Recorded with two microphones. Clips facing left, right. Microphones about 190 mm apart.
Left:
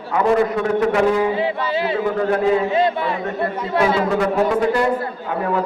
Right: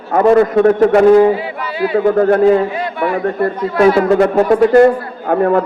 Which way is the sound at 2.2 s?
50° right (ahead or behind).